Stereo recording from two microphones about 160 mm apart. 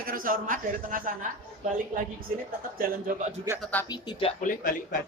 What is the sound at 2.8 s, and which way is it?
Speech, 65° right (ahead or behind).